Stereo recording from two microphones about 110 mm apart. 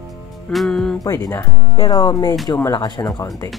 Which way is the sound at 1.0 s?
25° left (ahead or behind).